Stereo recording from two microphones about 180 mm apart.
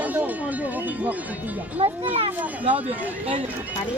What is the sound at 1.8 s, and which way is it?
Speech, 35° right (ahead or behind).